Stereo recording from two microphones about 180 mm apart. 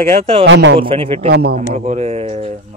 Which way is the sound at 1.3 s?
60° right (ahead or behind).